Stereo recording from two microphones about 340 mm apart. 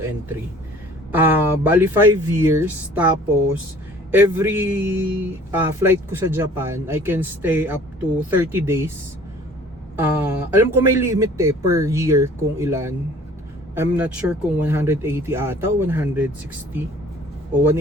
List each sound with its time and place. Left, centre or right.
1.1 s a man's voice: centre
10.0 s a man's voice: centre